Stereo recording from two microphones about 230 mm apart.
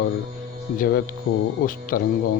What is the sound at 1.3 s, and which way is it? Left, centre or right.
Speech, left.